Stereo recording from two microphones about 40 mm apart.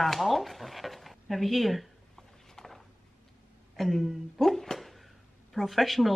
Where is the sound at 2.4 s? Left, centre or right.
Centre.